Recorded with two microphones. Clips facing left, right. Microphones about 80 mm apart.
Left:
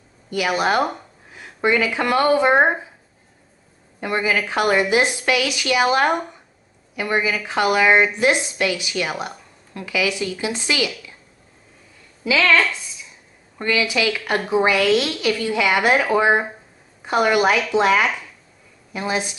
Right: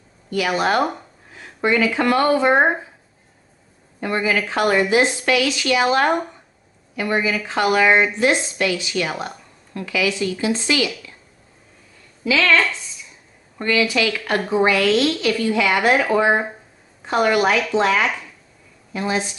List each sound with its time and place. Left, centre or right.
0.3 s speech: centre
4.0 s speech: centre
12.3 s speech: centre